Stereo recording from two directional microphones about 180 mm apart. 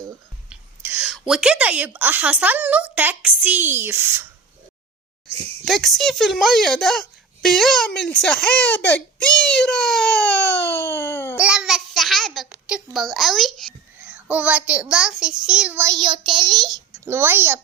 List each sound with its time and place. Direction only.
0.5 s whispering: 10° right (ahead or behind)
1.3 s speech: 5° right (ahead or behind)
5.6 s speech: centre (ahead or behind)
10.8 s a sound: 10° left (ahead or behind)
11.3 s a child's voice: 5° right (ahead or behind)
16.0 s child singing: 25° right (ahead or behind)
16.9 s a child's voice: 10° right (ahead or behind)